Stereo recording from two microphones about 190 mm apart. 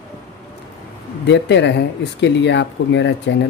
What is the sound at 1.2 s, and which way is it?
Speech, 65° left (ahead or behind).